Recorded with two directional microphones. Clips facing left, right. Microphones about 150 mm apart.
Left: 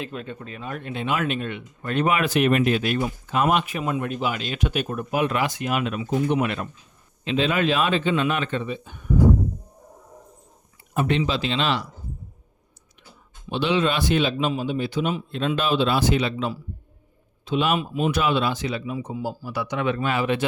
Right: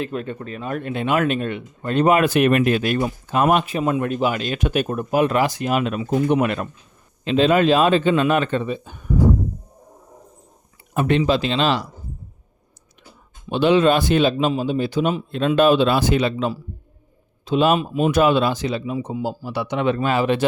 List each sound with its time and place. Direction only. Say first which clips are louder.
0.0 s speech: right 6 dB; 50° right (ahead or behind)
4.9 s speech: right 5 dB; 40° right (ahead or behind)
10.9 s speech: right 5 dB; 50° right (ahead or behind)
13.5 s speech: right 7 dB; 50° right (ahead or behind)